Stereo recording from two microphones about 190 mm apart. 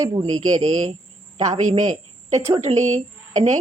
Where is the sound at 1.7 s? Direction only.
35° right (ahead or behind).